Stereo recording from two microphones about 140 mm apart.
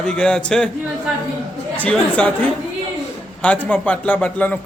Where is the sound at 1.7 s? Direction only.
10° left (ahead or behind).